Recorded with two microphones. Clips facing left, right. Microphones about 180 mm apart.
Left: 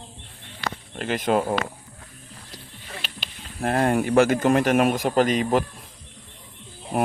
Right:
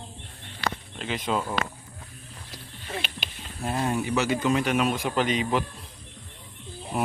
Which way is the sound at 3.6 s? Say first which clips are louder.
Left 6 dB; 60° left (ahead or behind).